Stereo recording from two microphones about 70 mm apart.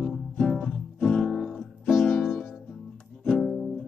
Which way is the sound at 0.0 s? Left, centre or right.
Centre.